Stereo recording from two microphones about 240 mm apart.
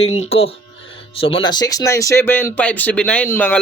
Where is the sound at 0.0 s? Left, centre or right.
Left.